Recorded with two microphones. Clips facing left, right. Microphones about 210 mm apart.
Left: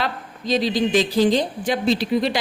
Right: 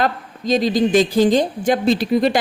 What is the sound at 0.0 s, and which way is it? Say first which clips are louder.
A woman's voice: right 6 dB; 45° right (ahead or behind).